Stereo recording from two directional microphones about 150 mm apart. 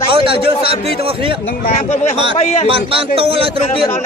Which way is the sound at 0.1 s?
35° right (ahead or behind).